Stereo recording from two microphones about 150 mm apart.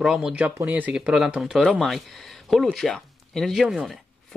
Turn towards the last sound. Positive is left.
turn(degrees=0)  # may be behind; listen again after turning